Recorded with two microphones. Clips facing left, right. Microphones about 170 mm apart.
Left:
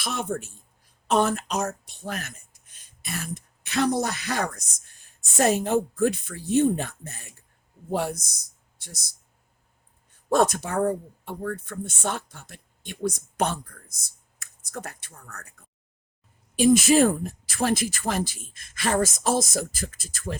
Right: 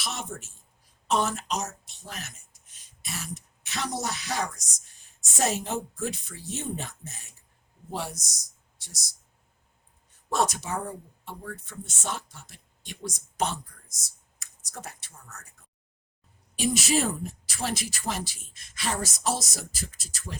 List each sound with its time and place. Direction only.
0.0 s speech: 55° left (ahead or behind)
10.2 s speech: 55° left (ahead or behind)
16.6 s speech: 50° left (ahead or behind)